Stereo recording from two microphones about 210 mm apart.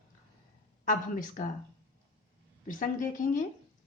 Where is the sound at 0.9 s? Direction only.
40° left (ahead or behind).